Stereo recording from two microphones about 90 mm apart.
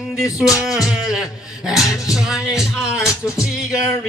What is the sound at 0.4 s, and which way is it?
Music, 5° right (ahead or behind).